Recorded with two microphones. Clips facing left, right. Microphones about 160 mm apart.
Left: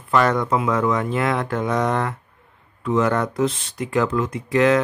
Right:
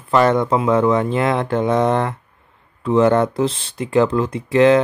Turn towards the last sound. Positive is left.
turn(degrees=-25)  # may be behind; listen again after turning